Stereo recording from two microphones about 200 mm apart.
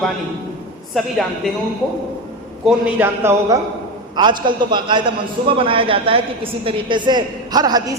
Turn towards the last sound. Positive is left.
turn(degrees=-20)  # may be behind; listen again after turning